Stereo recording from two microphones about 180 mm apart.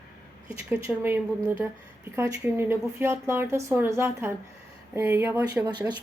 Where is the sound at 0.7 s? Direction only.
10° right (ahead or behind).